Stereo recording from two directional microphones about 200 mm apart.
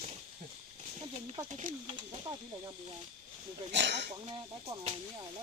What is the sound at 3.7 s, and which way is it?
Speech, 60° right (ahead or behind).